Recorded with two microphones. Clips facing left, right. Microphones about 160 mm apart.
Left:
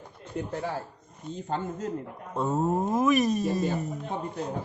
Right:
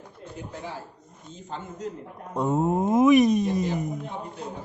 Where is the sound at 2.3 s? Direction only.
15° right (ahead or behind).